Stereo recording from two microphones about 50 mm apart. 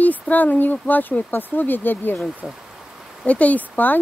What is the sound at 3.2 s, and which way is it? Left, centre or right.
Speech, left.